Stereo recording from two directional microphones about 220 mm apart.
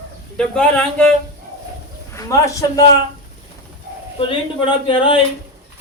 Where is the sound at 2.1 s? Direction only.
15° left (ahead or behind).